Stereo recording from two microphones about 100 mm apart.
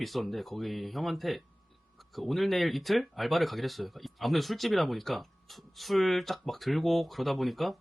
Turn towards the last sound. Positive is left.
turn(degrees=0)  # may be behind; listen again after turning